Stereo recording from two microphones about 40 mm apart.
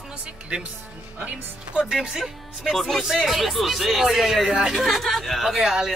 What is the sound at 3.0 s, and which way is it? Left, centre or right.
Speech, centre.